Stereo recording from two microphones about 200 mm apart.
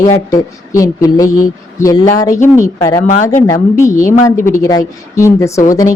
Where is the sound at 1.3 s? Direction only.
40° left (ahead or behind).